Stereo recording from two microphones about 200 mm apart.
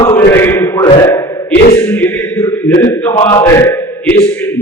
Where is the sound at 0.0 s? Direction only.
15° left (ahead or behind).